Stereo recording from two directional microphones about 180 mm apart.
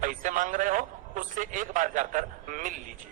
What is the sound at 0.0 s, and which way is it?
A man's voice, 45° right (ahead or behind).